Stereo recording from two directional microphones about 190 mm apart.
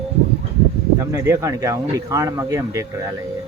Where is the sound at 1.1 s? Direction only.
15° right (ahead or behind).